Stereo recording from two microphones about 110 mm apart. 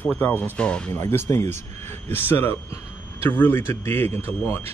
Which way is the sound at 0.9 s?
25° left (ahead or behind).